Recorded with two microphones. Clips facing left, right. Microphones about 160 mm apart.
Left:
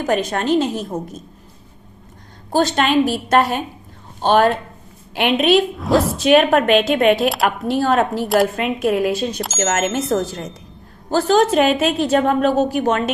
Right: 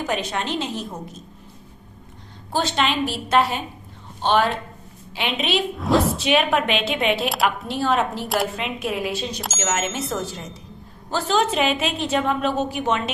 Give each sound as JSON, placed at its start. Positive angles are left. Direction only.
{"t": 0.0, "sound": "a woman's voice", "side_deg": 45}
{"t": 2.5, "sound": "a woman's voice", "side_deg": 45}
{"t": 5.7, "sound": "speech", "side_deg": 0}
{"t": 6.2, "sound": "a woman's voice", "side_deg": 45}